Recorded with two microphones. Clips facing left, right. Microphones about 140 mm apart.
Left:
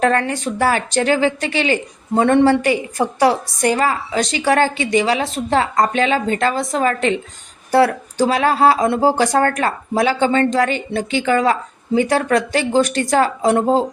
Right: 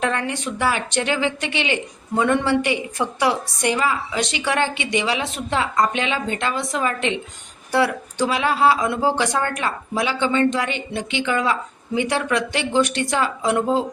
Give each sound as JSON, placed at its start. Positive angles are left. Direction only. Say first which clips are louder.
{"t": 0.0, "sound": "speech", "louder": "left 6 dB", "side_deg": 40}